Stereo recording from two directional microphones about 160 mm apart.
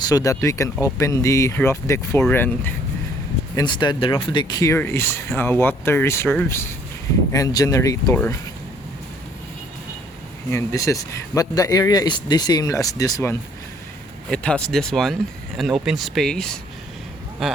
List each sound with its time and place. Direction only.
0.0 s speech: 25° left (ahead or behind)
3.5 s speech: 25° left (ahead or behind)
10.5 s speech: 20° left (ahead or behind)
14.3 s speech: 5° left (ahead or behind)